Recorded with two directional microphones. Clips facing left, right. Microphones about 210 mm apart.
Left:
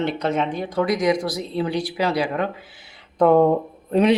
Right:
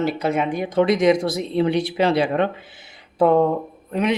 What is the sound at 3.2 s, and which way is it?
Speech, centre (ahead or behind).